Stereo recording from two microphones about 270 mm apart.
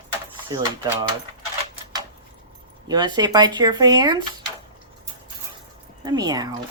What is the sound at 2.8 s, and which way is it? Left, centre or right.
Speech, centre.